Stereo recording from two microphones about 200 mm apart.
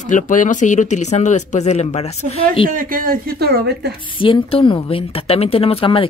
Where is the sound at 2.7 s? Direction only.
45° right (ahead or behind).